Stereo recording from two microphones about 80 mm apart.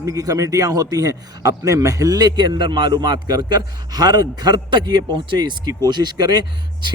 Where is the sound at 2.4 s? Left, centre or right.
Right.